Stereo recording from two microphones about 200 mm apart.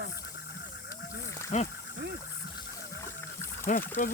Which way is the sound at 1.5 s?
35° left (ahead or behind).